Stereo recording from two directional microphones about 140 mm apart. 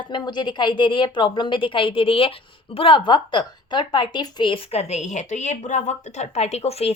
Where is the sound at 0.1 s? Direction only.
35° left (ahead or behind).